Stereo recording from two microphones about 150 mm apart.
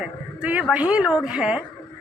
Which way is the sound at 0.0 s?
10° right (ahead or behind).